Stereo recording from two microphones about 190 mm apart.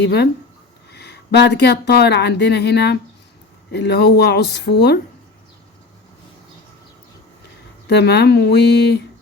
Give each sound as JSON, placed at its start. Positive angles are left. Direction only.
{"t": 0.0, "sound": "speech", "side_deg": 60}
{"t": 7.9, "sound": "speech", "side_deg": 60}